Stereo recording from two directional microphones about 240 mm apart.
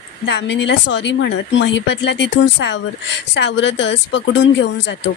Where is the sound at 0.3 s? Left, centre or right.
Left.